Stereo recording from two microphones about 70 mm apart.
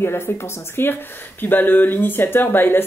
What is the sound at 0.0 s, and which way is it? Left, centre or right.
Speech, left.